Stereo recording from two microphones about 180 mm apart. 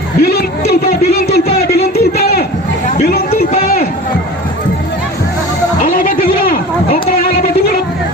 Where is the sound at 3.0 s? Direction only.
60° left (ahead or behind).